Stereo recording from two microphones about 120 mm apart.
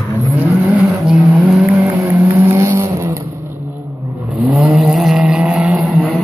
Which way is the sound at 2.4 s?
20° right (ahead or behind).